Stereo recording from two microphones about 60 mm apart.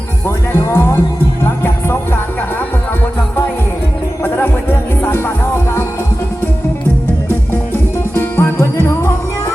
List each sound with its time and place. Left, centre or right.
0.3 s music: left
4.2 s music: left
8.1 s music: left